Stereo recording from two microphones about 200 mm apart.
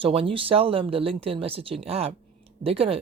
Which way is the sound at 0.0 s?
30° right (ahead or behind).